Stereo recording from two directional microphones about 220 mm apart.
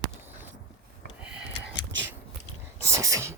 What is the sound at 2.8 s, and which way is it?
Whispering, 15° right (ahead or behind).